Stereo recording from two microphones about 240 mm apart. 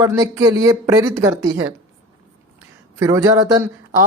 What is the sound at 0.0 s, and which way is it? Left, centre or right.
Speech, centre.